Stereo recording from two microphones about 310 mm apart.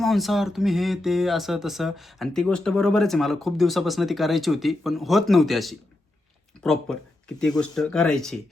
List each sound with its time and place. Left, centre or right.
0.0 s speech: centre